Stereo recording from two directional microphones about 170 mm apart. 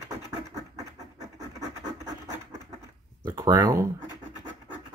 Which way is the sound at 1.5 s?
20° right (ahead or behind).